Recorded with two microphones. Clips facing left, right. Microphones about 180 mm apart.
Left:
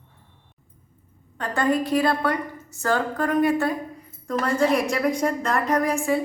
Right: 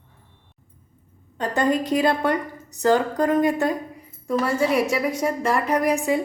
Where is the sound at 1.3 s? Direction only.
20° right (ahead or behind).